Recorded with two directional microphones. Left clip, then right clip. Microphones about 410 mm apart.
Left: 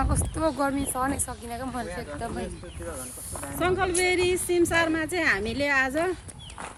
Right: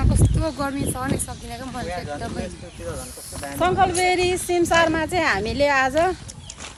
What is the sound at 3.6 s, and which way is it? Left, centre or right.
Speech, centre.